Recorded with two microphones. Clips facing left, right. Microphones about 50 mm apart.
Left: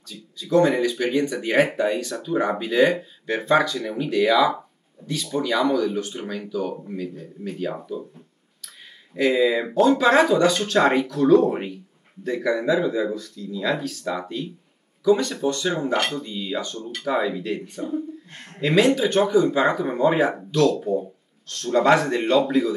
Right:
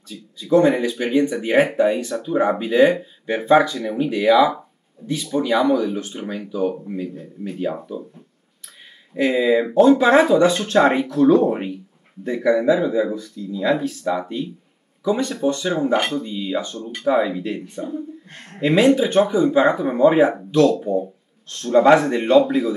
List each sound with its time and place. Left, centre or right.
0.1 s speech: centre
9.1 s speech: centre
11.4 s speech: centre
13.4 s speech: right; by 22.8 s centre